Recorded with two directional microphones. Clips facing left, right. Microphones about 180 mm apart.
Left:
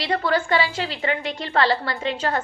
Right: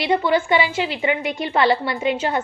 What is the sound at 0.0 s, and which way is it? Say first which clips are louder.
A woman's voice: right 4 dB; 15° right (ahead or behind).